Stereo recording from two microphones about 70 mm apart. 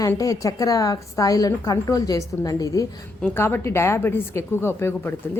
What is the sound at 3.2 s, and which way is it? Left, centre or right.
A woman's voice, left.